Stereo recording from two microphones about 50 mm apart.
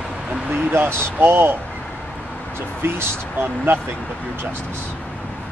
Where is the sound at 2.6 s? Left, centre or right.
Right.